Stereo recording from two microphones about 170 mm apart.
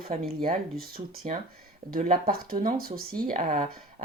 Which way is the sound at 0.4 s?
55° right (ahead or behind).